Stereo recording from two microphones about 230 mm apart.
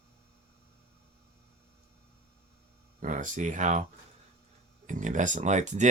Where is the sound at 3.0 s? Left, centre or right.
Right.